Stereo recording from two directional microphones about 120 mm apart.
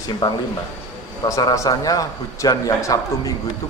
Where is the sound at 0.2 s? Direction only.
30° left (ahead or behind).